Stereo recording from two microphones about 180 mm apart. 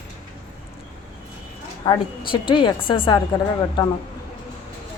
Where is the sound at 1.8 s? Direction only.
25° left (ahead or behind).